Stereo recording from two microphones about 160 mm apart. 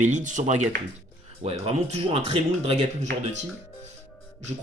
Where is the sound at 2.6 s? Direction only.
45° right (ahead or behind).